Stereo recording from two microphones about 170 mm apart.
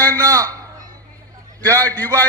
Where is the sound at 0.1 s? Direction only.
20° right (ahead or behind).